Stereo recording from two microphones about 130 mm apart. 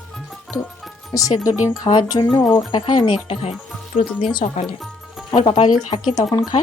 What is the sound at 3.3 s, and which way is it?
Speech, 50° left (ahead or behind).